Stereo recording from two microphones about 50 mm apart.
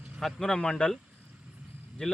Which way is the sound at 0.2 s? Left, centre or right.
Centre.